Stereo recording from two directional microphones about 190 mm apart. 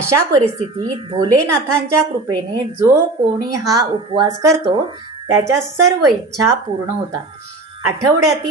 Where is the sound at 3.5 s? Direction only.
20° right (ahead or behind).